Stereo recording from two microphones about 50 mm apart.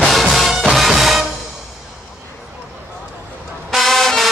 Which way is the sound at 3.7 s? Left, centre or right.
Centre.